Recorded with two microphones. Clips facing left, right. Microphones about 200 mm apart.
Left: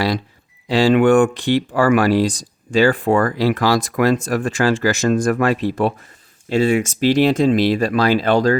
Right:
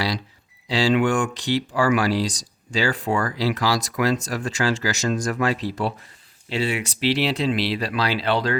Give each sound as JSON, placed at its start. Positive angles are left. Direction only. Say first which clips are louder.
{"t": 0.7, "sound": "speech", "louder": "left 7 dB", "side_deg": 55}